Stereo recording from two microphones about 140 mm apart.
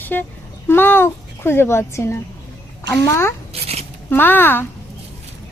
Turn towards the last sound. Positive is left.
turn(degrees=15)  # may be behind; listen again after turning